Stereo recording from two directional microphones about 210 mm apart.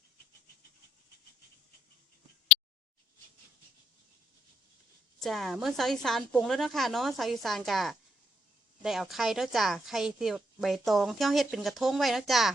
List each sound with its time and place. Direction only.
5.2 s a woman's voice: centre (ahead or behind)